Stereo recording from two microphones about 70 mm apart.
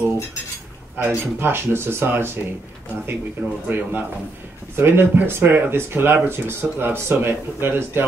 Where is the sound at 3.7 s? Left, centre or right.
Right.